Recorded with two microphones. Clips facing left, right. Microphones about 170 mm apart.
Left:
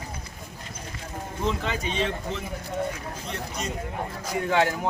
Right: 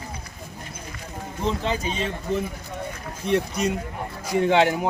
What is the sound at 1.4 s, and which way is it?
Speech, 35° right (ahead or behind).